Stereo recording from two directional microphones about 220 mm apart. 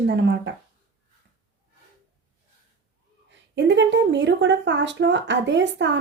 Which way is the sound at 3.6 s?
55° right (ahead or behind).